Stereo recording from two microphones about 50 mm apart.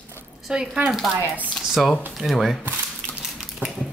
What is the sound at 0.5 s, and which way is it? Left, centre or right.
Speech, centre.